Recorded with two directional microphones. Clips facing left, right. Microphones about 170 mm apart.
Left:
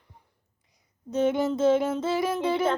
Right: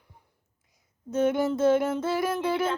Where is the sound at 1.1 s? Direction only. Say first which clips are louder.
Even; centre (ahead or behind).